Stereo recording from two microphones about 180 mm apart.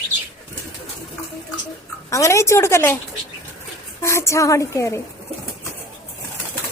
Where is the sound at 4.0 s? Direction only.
15° left (ahead or behind).